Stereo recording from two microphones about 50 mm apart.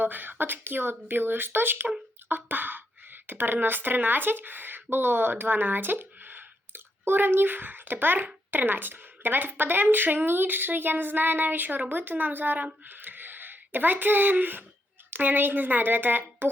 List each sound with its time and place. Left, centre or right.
0.0 s speech: right